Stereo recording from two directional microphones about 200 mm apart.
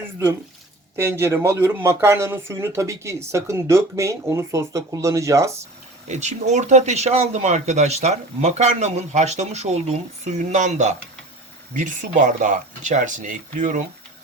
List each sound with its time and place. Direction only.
0.9 s speech: 10° right (ahead or behind)
6.1 s speech: 35° right (ahead or behind)